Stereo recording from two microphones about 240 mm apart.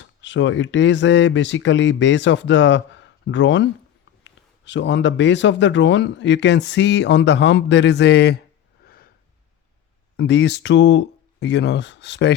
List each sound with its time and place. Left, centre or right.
0.0 s speech: left
10.2 s speech: left